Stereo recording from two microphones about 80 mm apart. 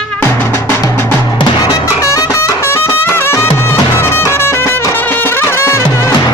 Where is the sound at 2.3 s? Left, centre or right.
Left.